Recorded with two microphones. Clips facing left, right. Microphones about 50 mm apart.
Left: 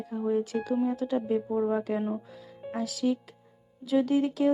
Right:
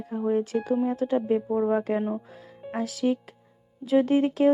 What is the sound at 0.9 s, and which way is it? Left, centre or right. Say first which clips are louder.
Speech: right 4 dB; right.